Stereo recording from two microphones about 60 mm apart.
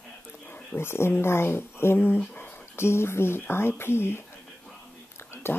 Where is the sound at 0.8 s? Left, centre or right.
Left.